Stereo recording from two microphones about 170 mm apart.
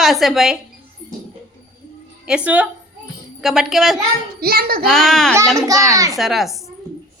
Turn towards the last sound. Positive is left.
turn(degrees=0)  # may be behind; listen again after turning